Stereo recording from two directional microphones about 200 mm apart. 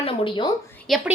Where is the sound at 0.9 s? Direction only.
Centre (ahead or behind).